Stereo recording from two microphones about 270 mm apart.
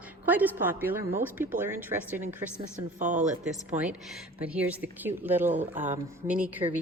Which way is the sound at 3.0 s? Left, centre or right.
Right.